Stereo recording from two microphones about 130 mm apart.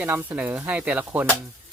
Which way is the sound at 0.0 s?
15° right (ahead or behind).